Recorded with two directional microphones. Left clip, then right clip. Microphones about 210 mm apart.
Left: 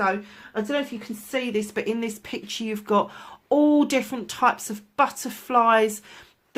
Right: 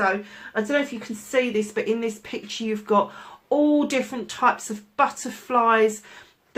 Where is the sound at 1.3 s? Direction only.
45° left (ahead or behind).